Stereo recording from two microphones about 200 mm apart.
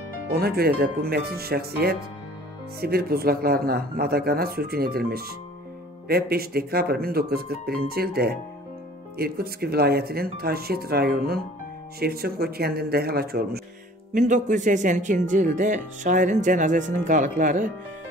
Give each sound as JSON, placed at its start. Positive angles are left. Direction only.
{"t": 0.3, "sound": "speech", "side_deg": -50}
{"t": 14.1, "sound": "speech", "side_deg": -40}